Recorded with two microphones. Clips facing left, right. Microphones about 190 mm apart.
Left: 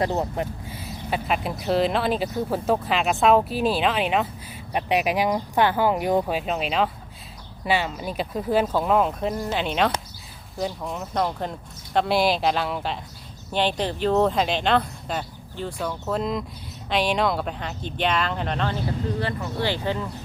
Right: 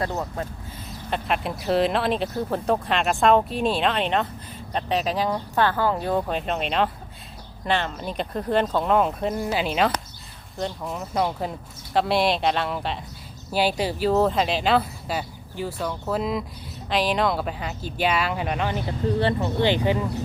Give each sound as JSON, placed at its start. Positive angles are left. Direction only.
{"t": 0.4, "sound": "speech", "side_deg": 20}
{"t": 0.9, "sound": "speech", "side_deg": 5}
{"t": 19.2, "sound": "speech", "side_deg": -25}